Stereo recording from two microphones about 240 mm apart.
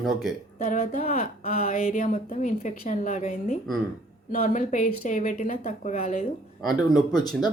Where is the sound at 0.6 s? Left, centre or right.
Left.